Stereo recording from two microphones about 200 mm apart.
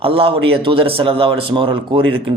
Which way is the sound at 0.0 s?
25° right (ahead or behind).